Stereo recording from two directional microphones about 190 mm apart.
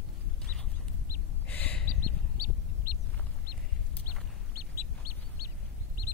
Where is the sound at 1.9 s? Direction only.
55° right (ahead or behind).